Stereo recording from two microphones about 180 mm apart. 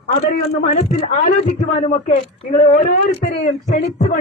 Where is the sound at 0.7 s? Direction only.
35° left (ahead or behind).